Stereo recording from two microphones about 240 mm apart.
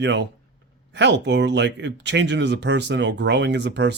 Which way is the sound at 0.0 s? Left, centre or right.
Right.